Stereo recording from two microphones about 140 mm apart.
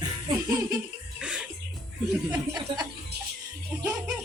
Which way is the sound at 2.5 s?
30° right (ahead or behind).